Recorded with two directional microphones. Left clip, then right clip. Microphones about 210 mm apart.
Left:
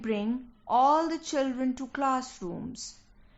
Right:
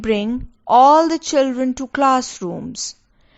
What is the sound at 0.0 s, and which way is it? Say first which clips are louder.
A woman's voice: right 12 dB; 40° right (ahead or behind).